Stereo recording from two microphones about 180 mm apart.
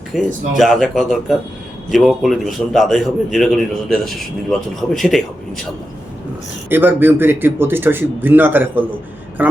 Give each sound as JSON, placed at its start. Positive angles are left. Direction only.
{"t": 0.1, "sound": "a man's voice", "side_deg": 0}
{"t": 6.7, "sound": "a man's voice", "side_deg": -10}